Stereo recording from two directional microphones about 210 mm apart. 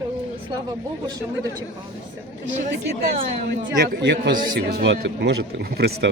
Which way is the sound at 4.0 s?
55° right (ahead or behind).